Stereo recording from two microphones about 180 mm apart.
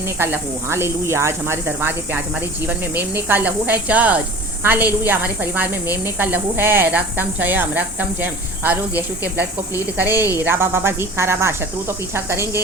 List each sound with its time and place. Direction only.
0.2 s a woman's voice: 15° right (ahead or behind)